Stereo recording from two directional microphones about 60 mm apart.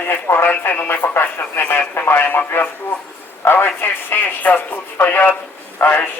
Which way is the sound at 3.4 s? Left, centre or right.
Left.